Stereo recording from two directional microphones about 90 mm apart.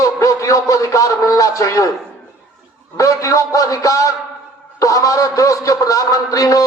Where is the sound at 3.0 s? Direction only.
35° left (ahead or behind).